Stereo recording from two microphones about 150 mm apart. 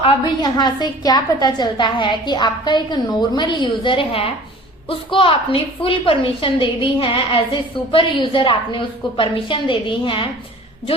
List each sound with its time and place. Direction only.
0.4 s a woman's voice: 30° left (ahead or behind)